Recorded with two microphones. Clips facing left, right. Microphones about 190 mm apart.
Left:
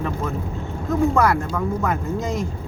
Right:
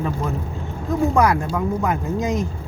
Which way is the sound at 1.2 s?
15° right (ahead or behind).